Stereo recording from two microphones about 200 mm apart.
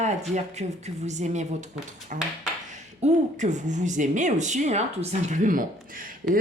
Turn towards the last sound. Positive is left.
turn(degrees=-45)  # may be behind; listen again after turning